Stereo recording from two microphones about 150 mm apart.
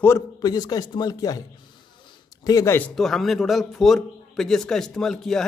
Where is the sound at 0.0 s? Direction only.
20° left (ahead or behind).